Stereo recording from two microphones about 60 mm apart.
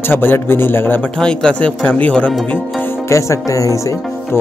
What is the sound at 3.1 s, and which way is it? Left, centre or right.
Speech, left.